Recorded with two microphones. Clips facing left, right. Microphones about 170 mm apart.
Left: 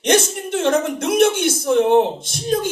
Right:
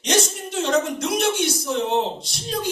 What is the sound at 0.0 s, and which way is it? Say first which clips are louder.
A woman's voice: left 5 dB; 55° left (ahead or behind).